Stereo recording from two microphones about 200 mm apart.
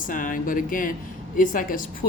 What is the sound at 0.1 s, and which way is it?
Speech, 40° left (ahead or behind).